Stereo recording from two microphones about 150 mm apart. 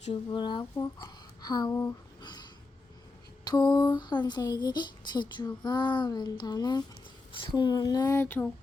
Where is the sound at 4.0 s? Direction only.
30° left (ahead or behind); by 8.5 s 15° left (ahead or behind).